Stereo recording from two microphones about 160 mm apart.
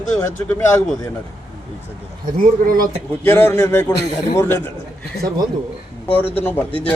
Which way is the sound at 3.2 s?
10° left (ahead or behind).